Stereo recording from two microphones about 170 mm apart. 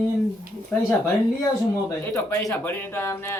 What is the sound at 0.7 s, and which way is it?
Speech, 10° left (ahead or behind).